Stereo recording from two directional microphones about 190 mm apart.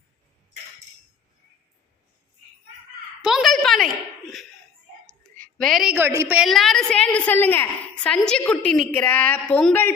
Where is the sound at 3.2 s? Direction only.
Centre (ahead or behind).